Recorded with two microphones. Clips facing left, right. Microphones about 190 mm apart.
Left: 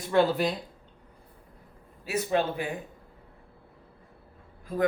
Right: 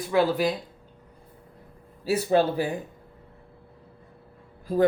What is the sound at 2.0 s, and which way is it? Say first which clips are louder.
Speech: right 5 dB; 30° right (ahead or behind).